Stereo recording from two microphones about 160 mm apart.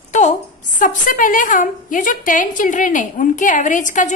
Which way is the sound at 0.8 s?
55° left (ahead or behind).